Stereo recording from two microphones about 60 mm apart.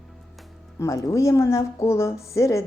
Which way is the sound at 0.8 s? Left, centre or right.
Left.